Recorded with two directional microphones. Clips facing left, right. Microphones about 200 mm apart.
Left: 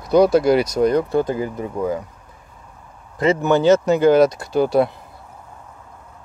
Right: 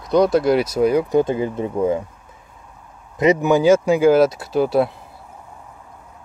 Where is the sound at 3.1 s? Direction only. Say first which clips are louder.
Right 1 dB; 15° right (ahead or behind).